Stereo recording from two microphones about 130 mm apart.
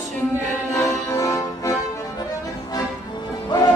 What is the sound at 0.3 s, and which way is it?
Music, 25° left (ahead or behind).